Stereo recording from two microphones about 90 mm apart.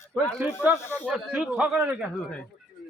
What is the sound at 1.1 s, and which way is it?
Speech, 10° right (ahead or behind).